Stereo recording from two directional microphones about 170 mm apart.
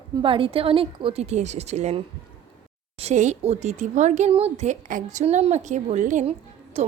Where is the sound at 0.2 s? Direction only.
30° right (ahead or behind).